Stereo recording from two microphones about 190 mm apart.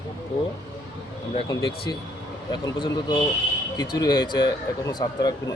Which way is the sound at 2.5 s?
25° left (ahead or behind).